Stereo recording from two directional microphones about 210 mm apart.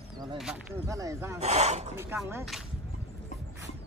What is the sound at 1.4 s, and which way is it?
Speech, 30° right (ahead or behind).